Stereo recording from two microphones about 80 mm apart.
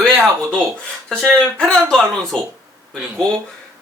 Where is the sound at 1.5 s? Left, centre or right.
Centre.